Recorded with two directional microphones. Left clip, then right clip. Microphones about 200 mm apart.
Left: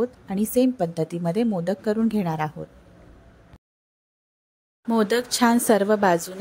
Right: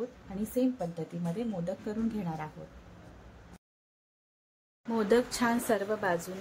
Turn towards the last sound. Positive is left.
turn(degrees=45)  # may be behind; listen again after turning